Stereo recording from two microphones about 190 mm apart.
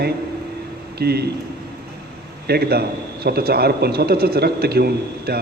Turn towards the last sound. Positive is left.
turn(degrees=-55)  # may be behind; listen again after turning